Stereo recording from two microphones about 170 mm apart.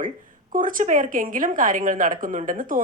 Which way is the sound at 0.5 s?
55° right (ahead or behind).